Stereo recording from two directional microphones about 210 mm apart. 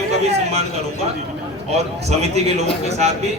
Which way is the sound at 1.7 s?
30° right (ahead or behind).